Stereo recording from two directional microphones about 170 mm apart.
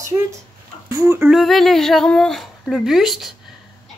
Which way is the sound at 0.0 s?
20° right (ahead or behind).